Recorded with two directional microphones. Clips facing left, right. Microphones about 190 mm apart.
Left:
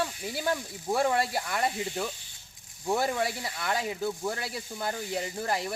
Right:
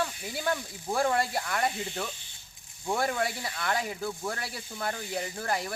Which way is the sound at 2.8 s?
10° left (ahead or behind).